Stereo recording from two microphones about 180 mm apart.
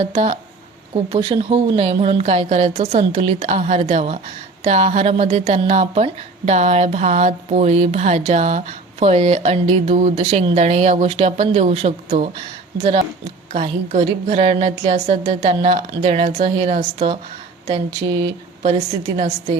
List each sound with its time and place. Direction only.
0.0 s a woman's voice: 35° right (ahead or behind)
18.2 s speech: 35° right (ahead or behind)